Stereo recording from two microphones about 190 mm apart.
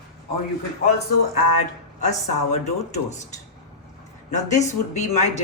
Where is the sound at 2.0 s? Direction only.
35° left (ahead or behind).